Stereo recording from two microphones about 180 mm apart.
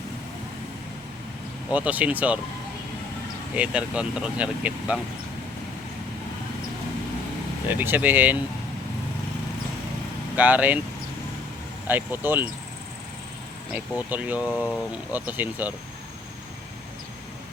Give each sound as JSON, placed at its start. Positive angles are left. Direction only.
{"t": 1.7, "sound": "speech", "side_deg": -10}
{"t": 3.5, "sound": "speech", "side_deg": -5}
{"t": 7.7, "sound": "speech", "side_deg": -10}
{"t": 10.3, "sound": "speech", "side_deg": -10}
{"t": 11.9, "sound": "speech", "side_deg": -10}
{"t": 13.7, "sound": "speech", "side_deg": -10}